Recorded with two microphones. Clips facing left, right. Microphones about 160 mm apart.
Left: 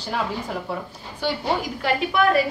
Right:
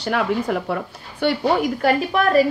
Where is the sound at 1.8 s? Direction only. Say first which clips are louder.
Right 3 dB; 40° right (ahead or behind).